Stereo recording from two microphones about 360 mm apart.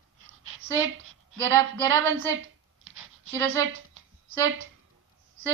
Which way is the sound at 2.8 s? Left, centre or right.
Right.